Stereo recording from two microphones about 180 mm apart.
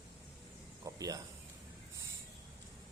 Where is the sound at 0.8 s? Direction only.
20° right (ahead or behind).